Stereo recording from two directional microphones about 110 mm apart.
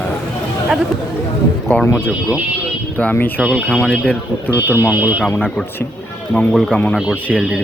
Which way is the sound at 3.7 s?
5° left (ahead or behind).